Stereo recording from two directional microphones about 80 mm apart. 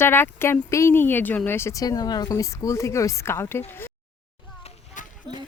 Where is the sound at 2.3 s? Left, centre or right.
Left.